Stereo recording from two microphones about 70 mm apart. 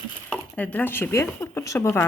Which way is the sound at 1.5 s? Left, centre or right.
Left.